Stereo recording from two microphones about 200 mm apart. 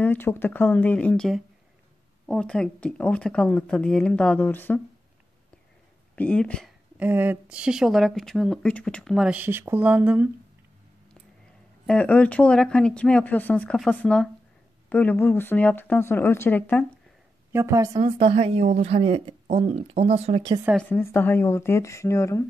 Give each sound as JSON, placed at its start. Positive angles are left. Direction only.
{"t": 0.0, "sound": "speech", "side_deg": 10}
{"t": 6.1, "sound": "speech", "side_deg": 5}
{"t": 7.0, "sound": "speech", "side_deg": -10}
{"t": 11.8, "sound": "speech", "side_deg": 5}
{"t": 17.5, "sound": "a woman's voice", "side_deg": -15}
{"t": 20.7, "sound": "speech", "side_deg": 10}